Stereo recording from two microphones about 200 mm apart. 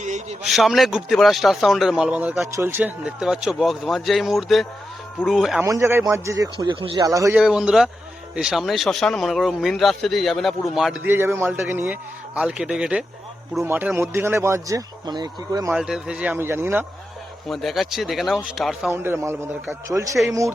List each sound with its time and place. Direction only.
0.0 s a sound: 35° right (ahead or behind)
0.4 s speech: centre (ahead or behind)
5.6 s speech: 15° right (ahead or behind)
7.3 s speech: 5° right (ahead or behind); by 15.7 s 20° right (ahead or behind)
15.7 s speech: 5° right (ahead or behind)
17.5 s speech: centre (ahead or behind)
18.9 s speech: 10° right (ahead or behind)